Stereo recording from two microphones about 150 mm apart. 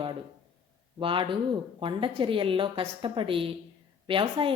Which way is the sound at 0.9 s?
35° right (ahead or behind).